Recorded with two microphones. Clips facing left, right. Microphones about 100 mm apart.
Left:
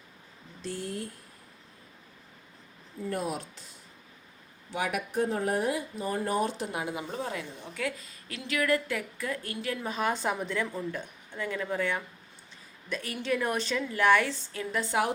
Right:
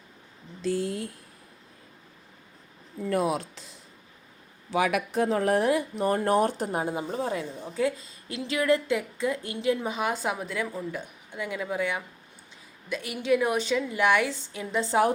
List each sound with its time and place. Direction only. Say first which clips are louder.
0.9 s speech: right 4 dB; 90° right
3.1 s speech: right 7 dB; 90° right
4.7 s speech: right 6 dB; 90° right; by 6.7 s 55° right (ahead or behind)
6.7 s a woman's voice: right 5 dB; 35° right (ahead or behind); by 14.8 s 15° right (ahead or behind)
14.8 s a woman's voice: right 5 dB; 30° right (ahead or behind)